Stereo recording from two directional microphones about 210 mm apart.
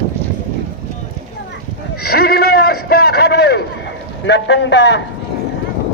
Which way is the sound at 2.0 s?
50° left (ahead or behind).